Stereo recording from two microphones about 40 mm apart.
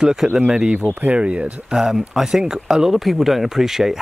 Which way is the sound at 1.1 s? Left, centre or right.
Right.